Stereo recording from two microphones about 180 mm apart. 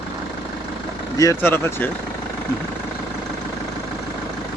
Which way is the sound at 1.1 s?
15° left (ahead or behind).